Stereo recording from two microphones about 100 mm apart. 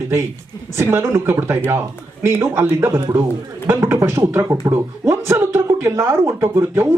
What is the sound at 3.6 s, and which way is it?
Speech, 25° right (ahead or behind).